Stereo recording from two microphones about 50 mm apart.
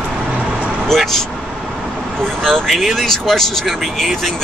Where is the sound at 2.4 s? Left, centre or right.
Centre.